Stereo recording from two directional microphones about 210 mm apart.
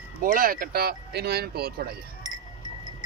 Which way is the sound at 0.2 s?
40° right (ahead or behind).